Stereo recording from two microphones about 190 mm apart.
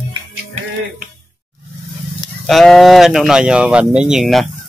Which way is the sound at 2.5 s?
Centre (ahead or behind).